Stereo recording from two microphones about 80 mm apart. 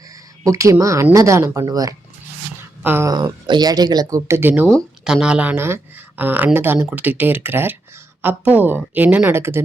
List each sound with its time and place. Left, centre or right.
0.4 s speech: right
2.8 s speech: right
3.1 s speech: right
4.3 s speech: right
5.0 s speech: centre
5.5 s speech: right
9.3 s speech: right